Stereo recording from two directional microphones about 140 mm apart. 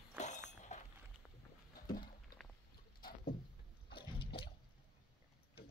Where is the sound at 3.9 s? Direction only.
40° left (ahead or behind).